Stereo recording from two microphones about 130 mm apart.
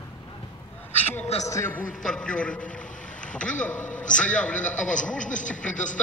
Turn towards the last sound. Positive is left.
turn(degrees=75)  # may be behind; listen again after turning